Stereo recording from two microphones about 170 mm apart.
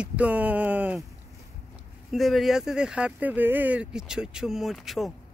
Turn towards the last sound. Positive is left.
turn(degrees=0)  # may be behind; listen again after turning